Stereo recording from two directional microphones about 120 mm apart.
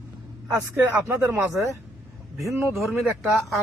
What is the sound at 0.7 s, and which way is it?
Speech, 20° right (ahead or behind).